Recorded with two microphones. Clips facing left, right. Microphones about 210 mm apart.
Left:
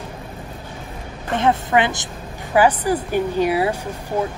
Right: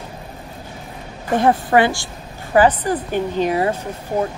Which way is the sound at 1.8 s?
20° left (ahead or behind).